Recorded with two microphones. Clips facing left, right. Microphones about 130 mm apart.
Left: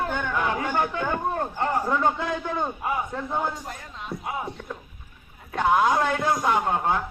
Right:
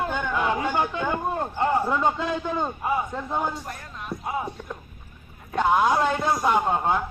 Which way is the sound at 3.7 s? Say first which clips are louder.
Right 1 dB; 25° left (ahead or behind).